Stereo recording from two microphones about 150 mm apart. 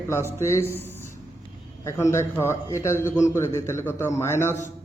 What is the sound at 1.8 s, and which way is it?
A man's voice, 20° left (ahead or behind).